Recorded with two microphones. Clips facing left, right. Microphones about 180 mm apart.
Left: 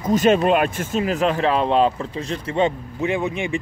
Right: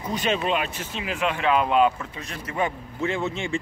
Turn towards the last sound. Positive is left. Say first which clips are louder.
# left 4 dB
turn(degrees=15)  # may be behind; listen again after turning